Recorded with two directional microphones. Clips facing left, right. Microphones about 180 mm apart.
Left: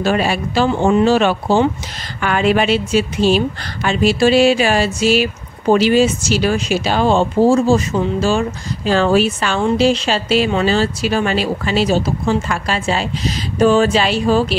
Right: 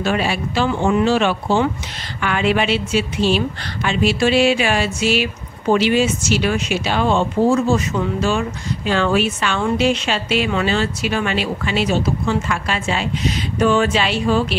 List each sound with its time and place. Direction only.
0.0 s speech: 40° left (ahead or behind)